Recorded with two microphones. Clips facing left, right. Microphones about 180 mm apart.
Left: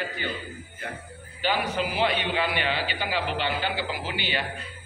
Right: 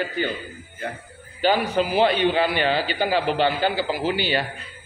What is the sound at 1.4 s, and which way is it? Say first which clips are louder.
A man's voice: right 6 dB; 35° right (ahead or behind).